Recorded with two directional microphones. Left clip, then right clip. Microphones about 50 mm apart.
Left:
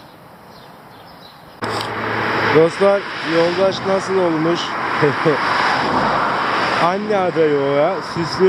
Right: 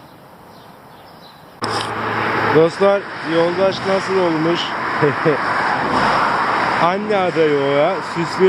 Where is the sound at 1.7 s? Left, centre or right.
Right.